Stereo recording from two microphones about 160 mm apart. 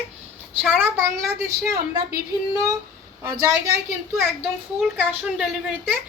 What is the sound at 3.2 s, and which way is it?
Speech, 20° right (ahead or behind).